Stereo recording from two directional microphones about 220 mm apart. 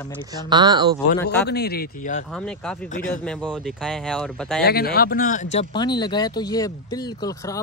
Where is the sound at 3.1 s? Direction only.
5° left (ahead or behind).